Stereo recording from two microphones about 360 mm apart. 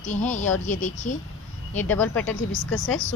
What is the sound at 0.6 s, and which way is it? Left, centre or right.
Speech, left.